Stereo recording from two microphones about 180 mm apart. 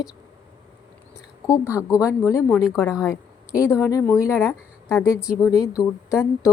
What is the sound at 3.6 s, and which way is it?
Speech, 15° left (ahead or behind).